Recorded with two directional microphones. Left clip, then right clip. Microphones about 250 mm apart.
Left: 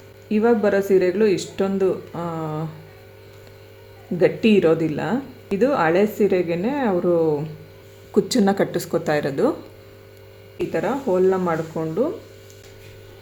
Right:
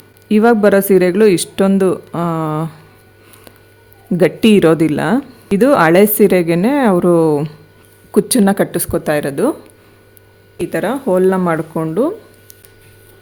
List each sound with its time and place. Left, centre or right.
0.3 s speech: right
4.2 s speech: right
8.1 s speech: right
10.7 s speech: right